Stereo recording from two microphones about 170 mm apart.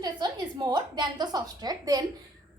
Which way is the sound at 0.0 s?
25° right (ahead or behind).